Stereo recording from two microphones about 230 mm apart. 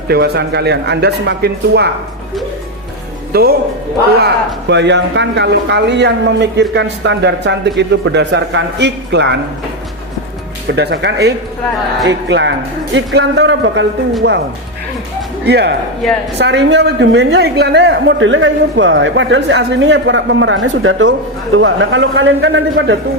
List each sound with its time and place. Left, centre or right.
0.1 s a woman's voice: right
3.3 s speech: right
4.7 s a woman's voice: right
10.7 s a woman's voice: right
15.4 s a woman's voice: right